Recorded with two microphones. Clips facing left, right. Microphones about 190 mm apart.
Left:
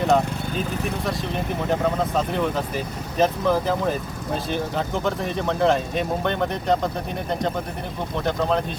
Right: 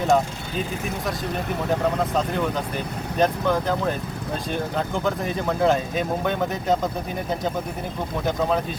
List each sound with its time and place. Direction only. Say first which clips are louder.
0.0 s speech: left 1 dB; centre (ahead or behind)
1.7 s speech: even; centre (ahead or behind)
5.0 s speech: even; centre (ahead or behind)